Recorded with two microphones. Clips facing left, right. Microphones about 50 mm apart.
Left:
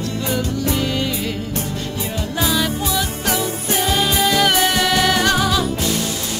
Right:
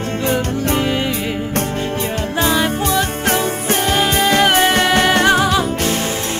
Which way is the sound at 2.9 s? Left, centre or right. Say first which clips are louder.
Right 4 dB; right.